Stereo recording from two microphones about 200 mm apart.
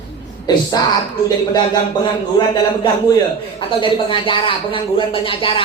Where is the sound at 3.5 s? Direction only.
25° left (ahead or behind).